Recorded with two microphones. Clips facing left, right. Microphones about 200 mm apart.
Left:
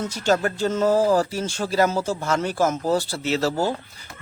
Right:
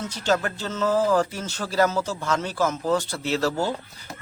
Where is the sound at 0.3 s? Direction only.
45° left (ahead or behind).